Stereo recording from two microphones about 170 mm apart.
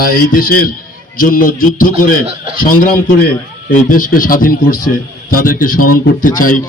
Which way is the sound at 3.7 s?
50° left (ahead or behind).